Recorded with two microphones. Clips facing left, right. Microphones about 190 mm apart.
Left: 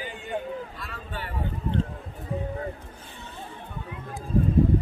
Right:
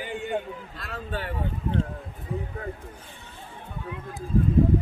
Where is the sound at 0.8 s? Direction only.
75° right (ahead or behind).